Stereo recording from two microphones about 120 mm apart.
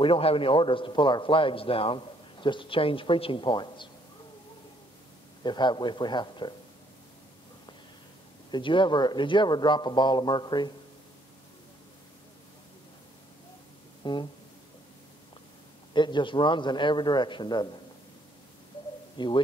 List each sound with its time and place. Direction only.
0.0 s a man's voice: 50° left (ahead or behind)
5.4 s speech: 40° left (ahead or behind)
8.5 s speech: 40° left (ahead or behind)
14.0 s speech: 40° left (ahead or behind)
15.9 s speech: 40° left (ahead or behind)
19.1 s speech: 40° left (ahead or behind)